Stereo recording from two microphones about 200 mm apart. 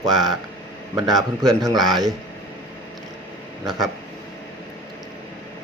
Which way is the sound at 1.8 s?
Centre (ahead or behind).